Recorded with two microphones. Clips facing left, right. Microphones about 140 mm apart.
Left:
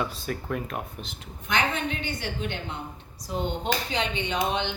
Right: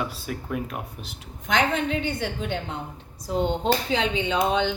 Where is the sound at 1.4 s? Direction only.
90° right.